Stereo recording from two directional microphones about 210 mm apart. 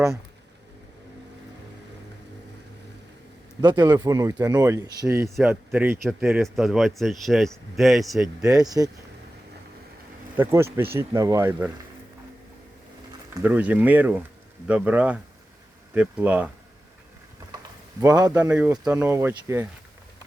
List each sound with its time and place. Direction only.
3.6 s a man's voice: 20° right (ahead or behind); by 8.0 s centre (ahead or behind)
8.4 s speech: 15° right (ahead or behind)
10.3 s speech: 10° right (ahead or behind)
13.3 s speech: 10° right (ahead or behind)
18.0 s speech: 15° right (ahead or behind)
18.3 s speech: 5° right (ahead or behind)